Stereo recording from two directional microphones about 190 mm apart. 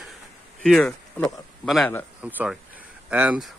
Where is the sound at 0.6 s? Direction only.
Centre (ahead or behind).